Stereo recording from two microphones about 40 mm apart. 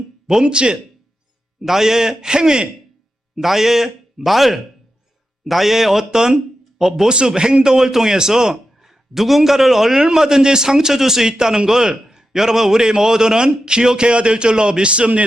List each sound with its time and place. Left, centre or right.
0.3 s speech: centre
1.6 s a man's voice: centre
3.3 s a man's voice: centre
7.1 s a man's voice: right